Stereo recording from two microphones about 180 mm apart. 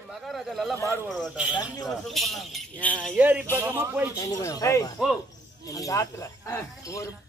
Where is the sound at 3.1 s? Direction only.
10° right (ahead or behind).